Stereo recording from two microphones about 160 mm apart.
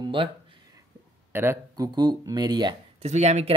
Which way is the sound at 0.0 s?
30° right (ahead or behind).